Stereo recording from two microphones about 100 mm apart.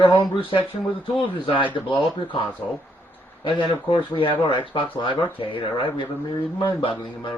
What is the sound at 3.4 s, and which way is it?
Speech, 50° left (ahead or behind).